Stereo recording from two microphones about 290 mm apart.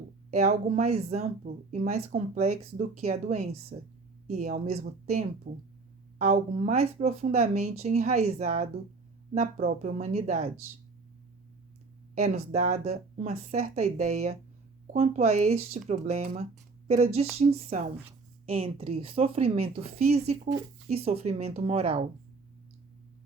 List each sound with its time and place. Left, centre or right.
0.3 s speech: right
12.1 s speech: right